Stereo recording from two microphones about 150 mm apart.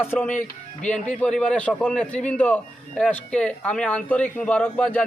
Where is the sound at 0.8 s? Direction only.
10° left (ahead or behind).